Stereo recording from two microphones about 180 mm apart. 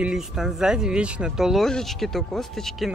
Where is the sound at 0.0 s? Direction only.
5° right (ahead or behind).